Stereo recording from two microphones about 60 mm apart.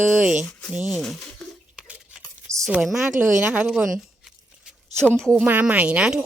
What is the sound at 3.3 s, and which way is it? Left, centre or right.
Speech, right.